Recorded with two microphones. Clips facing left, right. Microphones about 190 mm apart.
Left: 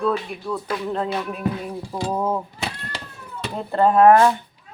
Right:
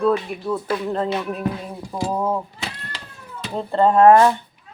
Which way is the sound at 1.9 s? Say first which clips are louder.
Right 1 dB; 5° left (ahead or behind).